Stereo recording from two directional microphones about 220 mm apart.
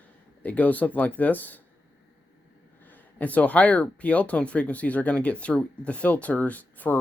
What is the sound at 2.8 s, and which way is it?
Speech, 10° left (ahead or behind).